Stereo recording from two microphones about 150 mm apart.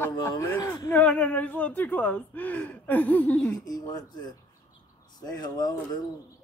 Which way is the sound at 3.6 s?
25° left (ahead or behind).